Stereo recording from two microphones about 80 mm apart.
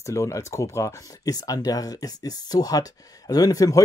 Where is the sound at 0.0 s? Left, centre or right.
Left.